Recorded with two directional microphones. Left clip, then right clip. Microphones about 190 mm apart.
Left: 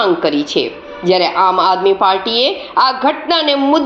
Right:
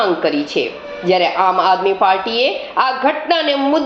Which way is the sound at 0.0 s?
35° left (ahead or behind).